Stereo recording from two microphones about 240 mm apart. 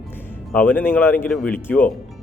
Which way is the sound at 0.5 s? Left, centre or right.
Centre.